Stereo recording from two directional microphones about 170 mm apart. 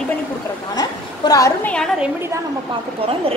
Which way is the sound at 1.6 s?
5° left (ahead or behind).